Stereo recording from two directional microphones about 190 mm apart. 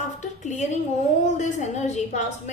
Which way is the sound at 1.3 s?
40° left (ahead or behind).